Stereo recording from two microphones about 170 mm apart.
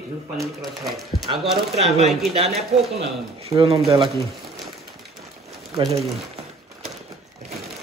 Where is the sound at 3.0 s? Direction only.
35° right (ahead or behind).